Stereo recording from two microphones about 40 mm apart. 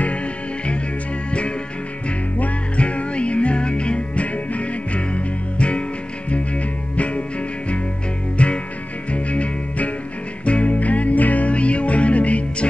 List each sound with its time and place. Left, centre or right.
2.8 s music: left
8.4 s music: left